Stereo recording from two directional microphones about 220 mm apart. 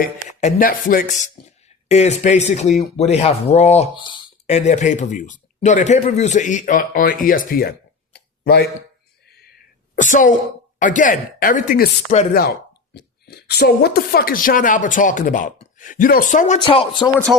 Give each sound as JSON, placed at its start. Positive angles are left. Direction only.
{"t": 0.0, "sound": "speech", "side_deg": 30}
{"t": 8.1, "sound": "a sound", "side_deg": 45}
{"t": 10.8, "sound": "speech", "side_deg": 35}
{"t": 16.6, "sound": "speech", "side_deg": 20}